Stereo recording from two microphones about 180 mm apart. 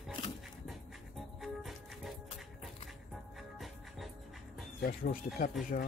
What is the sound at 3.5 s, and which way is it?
Music, centre (ahead or behind).